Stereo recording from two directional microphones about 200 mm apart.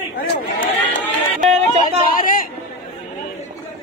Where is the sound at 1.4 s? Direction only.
35° right (ahead or behind).